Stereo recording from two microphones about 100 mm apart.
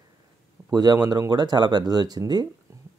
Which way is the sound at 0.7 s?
40° right (ahead or behind).